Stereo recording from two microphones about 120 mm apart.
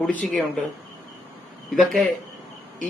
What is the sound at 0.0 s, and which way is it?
Speech, 10° left (ahead or behind).